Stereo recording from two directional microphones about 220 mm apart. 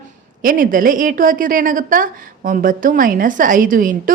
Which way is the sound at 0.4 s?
40° right (ahead or behind).